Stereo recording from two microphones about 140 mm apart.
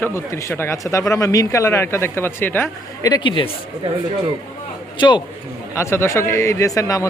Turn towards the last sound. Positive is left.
turn(degrees=25)  # may be behind; listen again after turning